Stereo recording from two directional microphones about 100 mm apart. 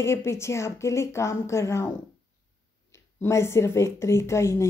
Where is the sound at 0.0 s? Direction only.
25° left (ahead or behind).